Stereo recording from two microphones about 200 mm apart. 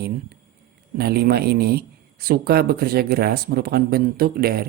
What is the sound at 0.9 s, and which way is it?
Speech, 50° right (ahead or behind).